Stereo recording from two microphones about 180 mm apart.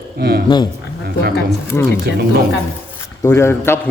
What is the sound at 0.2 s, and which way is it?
Speech, 60° right (ahead or behind).